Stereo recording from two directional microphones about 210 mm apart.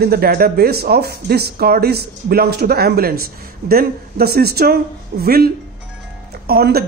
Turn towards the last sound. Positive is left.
turn(degrees=-45)  # may be behind; listen again after turning